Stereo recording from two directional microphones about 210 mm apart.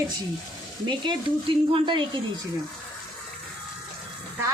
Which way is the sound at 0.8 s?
20° right (ahead or behind).